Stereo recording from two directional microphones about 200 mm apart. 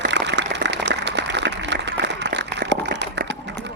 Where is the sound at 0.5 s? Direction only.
60° right (ahead or behind).